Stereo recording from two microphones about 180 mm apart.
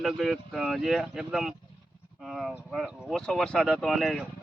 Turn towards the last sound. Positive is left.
turn(degrees=0)  # may be behind; listen again after turning